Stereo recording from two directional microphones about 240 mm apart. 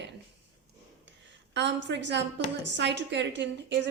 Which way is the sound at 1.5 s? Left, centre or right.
Right.